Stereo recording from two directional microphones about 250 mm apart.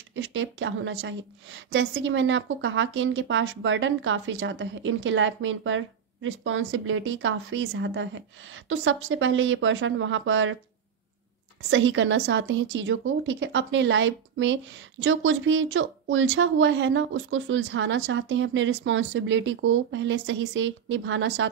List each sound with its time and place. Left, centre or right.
0.1 s a woman's voice: right
11.7 s a woman's voice: right